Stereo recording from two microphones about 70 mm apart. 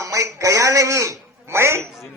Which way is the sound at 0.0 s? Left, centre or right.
Right.